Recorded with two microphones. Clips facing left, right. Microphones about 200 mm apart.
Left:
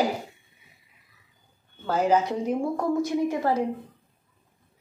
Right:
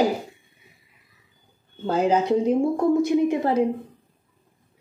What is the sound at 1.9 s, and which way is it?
Speech, 25° right (ahead or behind).